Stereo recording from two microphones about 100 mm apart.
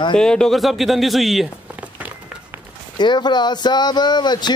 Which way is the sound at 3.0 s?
50° left (ahead or behind).